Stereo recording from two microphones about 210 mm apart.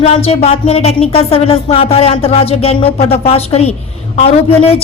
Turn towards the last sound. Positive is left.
turn(degrees=30)  # may be behind; listen again after turning